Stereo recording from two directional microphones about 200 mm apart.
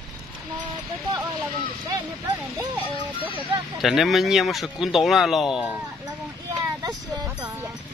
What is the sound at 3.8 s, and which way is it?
Speech, centre (ahead or behind).